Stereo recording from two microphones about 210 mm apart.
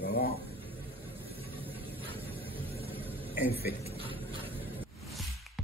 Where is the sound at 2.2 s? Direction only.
25° right (ahead or behind).